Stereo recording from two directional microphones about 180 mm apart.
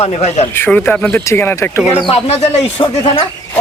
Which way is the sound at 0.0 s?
35° left (ahead or behind).